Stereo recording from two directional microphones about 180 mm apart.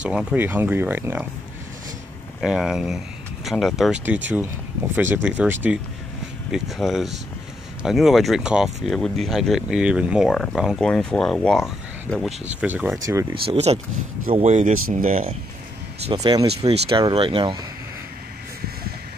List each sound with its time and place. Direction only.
0.0 s speech: 5° right (ahead or behind)
2.4 s speech: centre (ahead or behind)
13.3 s speech: 35° right (ahead or behind)
16.1 s speech: 20° right (ahead or behind)